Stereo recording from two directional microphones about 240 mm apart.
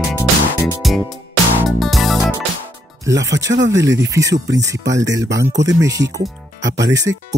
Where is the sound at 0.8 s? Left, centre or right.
Centre.